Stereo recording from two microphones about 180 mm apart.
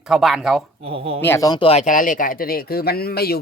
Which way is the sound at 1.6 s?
40° left (ahead or behind).